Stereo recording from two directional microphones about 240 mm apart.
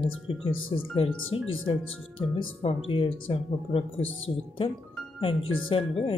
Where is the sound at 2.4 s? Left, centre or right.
Left.